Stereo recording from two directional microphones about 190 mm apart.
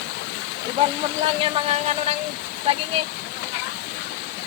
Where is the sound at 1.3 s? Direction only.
30° right (ahead or behind).